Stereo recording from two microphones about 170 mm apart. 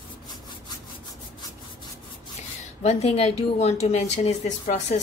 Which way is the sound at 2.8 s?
35° left (ahead or behind).